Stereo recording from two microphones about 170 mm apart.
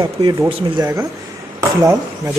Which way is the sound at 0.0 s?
25° right (ahead or behind).